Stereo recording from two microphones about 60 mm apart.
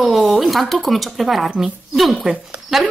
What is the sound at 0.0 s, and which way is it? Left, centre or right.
Speech, centre.